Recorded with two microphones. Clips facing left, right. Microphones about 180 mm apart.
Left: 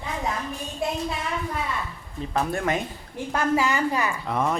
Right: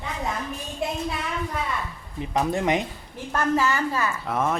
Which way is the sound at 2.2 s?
15° right (ahead or behind).